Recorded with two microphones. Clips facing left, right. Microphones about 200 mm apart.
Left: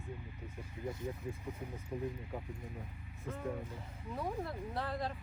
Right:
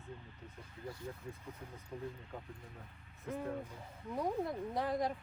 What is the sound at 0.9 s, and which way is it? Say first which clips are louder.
Speech: left 5 dB; 20° left (ahead or behind).